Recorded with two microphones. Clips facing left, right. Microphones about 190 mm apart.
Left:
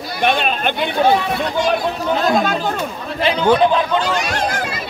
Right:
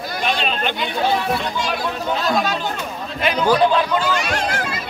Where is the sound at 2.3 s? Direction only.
55° left (ahead or behind).